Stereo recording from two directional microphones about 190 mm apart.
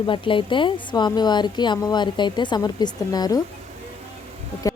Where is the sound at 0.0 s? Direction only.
25° left (ahead or behind).